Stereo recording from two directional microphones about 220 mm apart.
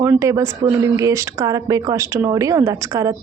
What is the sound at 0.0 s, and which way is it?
Speech, 15° right (ahead or behind).